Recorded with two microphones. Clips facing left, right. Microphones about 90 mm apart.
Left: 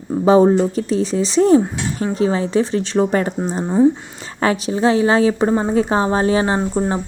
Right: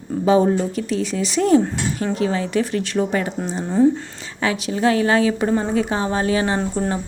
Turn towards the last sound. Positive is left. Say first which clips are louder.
# left 3 dB
turn(degrees=30)  # may be behind; listen again after turning